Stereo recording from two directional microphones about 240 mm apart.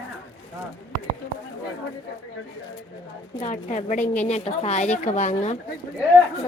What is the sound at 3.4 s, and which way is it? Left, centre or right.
A woman's voice, left.